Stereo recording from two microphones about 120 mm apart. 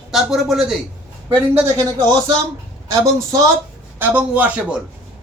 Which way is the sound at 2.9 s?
25° right (ahead or behind).